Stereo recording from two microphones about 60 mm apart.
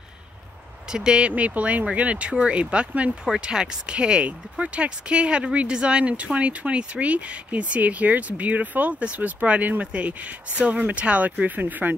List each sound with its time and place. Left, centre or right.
0.9 s speech: centre
1.3 s speech: right